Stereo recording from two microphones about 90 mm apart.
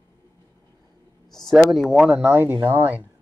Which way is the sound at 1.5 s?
Centre (ahead or behind).